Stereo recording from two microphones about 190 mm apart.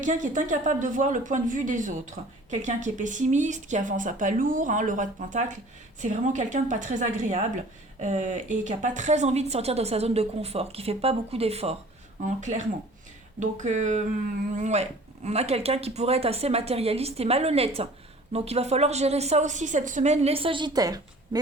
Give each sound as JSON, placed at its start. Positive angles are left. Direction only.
{"t": 0.0, "sound": "speech", "side_deg": -40}